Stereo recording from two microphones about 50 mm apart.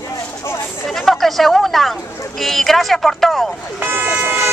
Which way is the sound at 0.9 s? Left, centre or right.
Centre.